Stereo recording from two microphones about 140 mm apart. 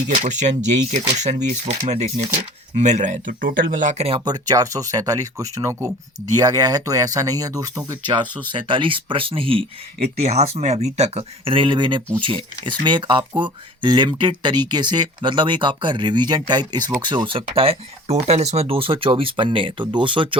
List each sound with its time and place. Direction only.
0.1 s speech: 60° right (ahead or behind)
4.2 s speech: 30° right (ahead or behind)